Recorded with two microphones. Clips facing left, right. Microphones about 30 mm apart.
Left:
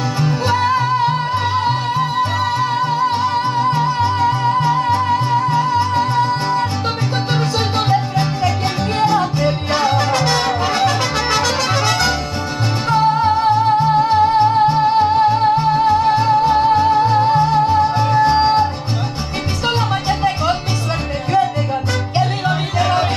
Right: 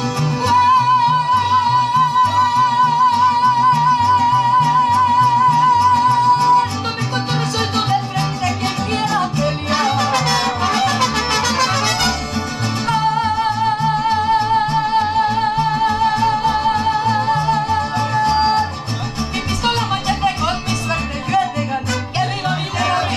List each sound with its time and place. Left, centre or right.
0.2 s music: centre
13.2 s music: centre
22.5 s music: centre